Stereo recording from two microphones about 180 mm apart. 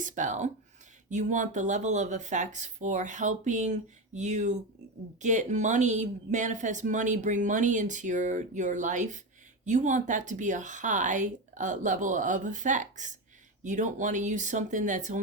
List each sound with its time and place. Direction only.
0.0 s speech: 45° right (ahead or behind)